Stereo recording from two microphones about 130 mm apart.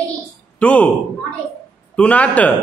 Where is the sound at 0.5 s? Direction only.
10° left (ahead or behind).